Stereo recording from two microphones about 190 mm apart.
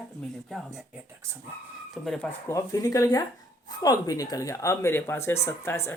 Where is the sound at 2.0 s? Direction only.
Centre (ahead or behind).